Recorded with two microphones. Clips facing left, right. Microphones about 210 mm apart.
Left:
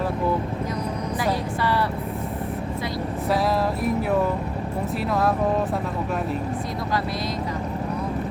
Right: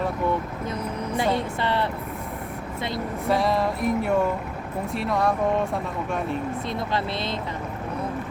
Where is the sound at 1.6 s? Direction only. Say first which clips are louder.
Left 3 dB; 25° right (ahead or behind).